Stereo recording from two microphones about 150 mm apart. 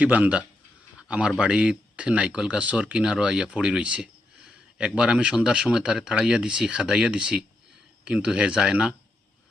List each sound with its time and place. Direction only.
0.0 s speech: 10° right (ahead or behind)